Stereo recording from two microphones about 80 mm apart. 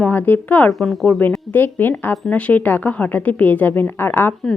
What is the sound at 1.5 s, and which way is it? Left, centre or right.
A woman's voice, left.